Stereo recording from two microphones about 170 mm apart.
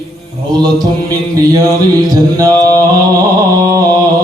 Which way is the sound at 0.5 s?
25° right (ahead or behind).